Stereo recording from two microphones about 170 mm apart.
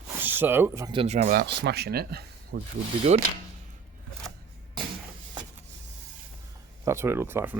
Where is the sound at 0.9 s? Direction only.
30° right (ahead or behind).